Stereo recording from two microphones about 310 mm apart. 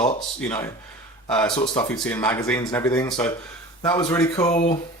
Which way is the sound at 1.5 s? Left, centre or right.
Centre.